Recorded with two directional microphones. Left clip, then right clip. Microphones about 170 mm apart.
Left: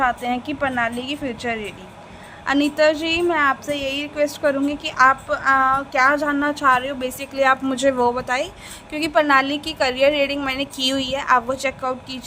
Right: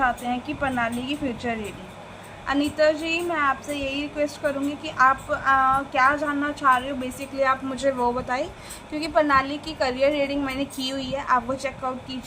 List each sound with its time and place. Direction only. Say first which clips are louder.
0.0 s a woman's voice: left 3 dB; 55° left (ahead or behind)